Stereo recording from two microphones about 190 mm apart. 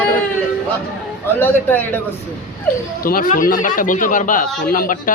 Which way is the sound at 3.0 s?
50° left (ahead or behind).